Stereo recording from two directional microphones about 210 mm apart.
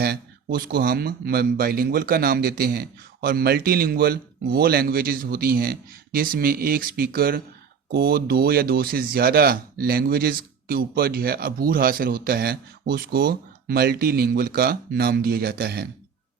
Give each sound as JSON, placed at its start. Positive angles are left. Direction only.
{"t": 0.0, "sound": "speech", "side_deg": -45}